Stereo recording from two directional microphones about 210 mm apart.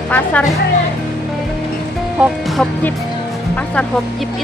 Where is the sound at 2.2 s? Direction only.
Centre (ahead or behind).